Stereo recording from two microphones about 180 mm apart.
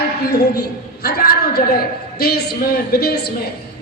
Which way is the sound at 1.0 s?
60° left (ahead or behind).